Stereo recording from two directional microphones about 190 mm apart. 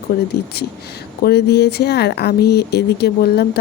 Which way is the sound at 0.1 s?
55° left (ahead or behind).